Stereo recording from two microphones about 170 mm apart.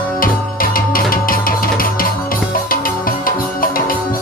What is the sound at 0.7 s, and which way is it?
Music, 55° left (ahead or behind).